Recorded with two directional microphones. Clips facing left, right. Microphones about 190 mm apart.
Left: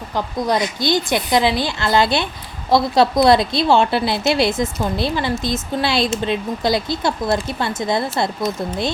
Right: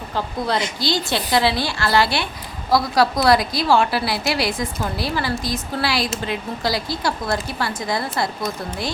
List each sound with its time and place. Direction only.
0.4 s a woman's voice: 15° left (ahead or behind)